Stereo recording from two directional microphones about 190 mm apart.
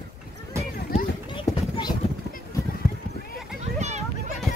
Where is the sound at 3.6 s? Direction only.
35° right (ahead or behind).